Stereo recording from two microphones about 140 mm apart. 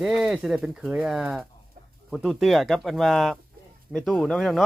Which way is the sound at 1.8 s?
80° right.